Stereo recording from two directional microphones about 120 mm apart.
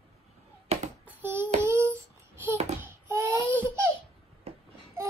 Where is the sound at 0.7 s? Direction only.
60° right (ahead or behind).